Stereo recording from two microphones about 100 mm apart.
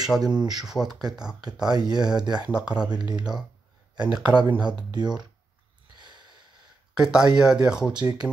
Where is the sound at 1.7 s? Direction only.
45° right (ahead or behind).